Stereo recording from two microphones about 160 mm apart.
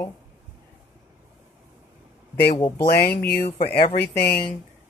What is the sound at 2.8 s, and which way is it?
Speech, 80° left.